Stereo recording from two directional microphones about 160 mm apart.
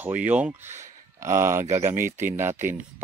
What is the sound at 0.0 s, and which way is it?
Speech, 10° right (ahead or behind).